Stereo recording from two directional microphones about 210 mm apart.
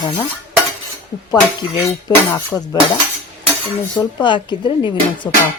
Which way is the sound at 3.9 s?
20° left (ahead or behind).